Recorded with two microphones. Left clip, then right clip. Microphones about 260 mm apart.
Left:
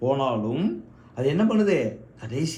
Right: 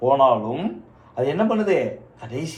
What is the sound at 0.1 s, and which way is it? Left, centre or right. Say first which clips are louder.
A man's voice: right 11 dB; left.